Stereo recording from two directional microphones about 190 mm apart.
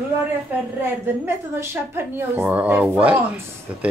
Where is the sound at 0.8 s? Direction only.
15° right (ahead or behind).